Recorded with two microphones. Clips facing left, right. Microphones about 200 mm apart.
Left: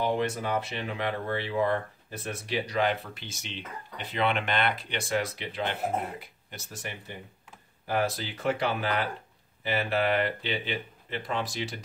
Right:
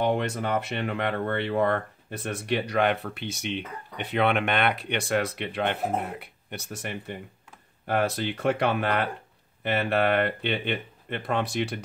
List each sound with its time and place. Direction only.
0.0 s speech: 65° right (ahead or behind)